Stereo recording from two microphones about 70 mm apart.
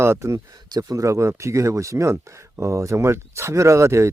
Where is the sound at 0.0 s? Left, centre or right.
Right.